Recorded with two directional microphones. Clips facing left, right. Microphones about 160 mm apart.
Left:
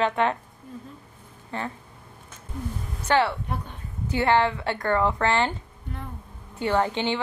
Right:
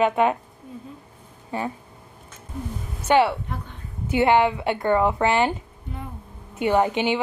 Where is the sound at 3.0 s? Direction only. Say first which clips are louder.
Right 4 dB; 20° right (ahead or behind).